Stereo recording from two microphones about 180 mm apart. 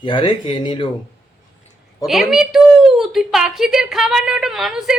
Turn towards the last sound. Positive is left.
turn(degrees=0)  # may be behind; listen again after turning